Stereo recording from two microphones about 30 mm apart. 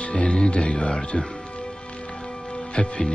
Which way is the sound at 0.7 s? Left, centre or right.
Left.